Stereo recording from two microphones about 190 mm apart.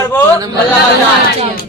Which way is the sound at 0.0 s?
10° left (ahead or behind).